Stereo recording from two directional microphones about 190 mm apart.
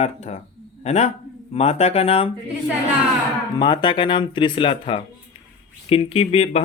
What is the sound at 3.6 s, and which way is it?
Speech, 25° left (ahead or behind).